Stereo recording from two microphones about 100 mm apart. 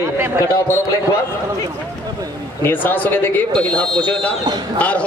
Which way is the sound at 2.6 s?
20° left (ahead or behind).